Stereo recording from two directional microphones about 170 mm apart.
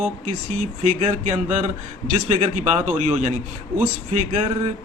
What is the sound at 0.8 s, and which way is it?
Speech, 40° right (ahead or behind).